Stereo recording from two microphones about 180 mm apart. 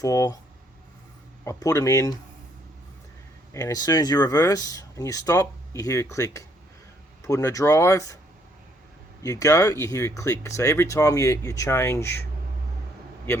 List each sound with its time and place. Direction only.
0.0 s speech: 20° left (ahead or behind)
1.5 s speech: 20° left (ahead or behind)
3.5 s speech: 20° left (ahead or behind)
9.2 s speech: 15° left (ahead or behind)